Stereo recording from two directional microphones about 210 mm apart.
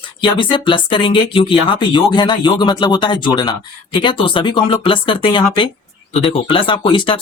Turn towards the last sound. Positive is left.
turn(degrees=25)  # may be behind; listen again after turning